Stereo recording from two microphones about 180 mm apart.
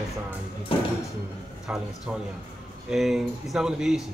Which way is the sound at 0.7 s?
30° left (ahead or behind).